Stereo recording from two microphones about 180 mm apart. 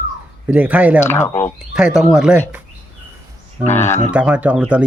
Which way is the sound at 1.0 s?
15° left (ahead or behind).